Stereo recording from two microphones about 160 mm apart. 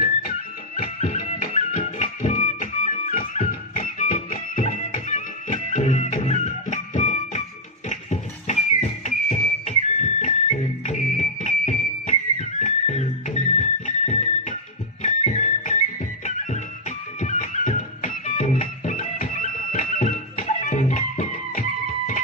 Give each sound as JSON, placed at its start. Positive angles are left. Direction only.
{"t": 1.1, "sound": "music", "side_deg": 50}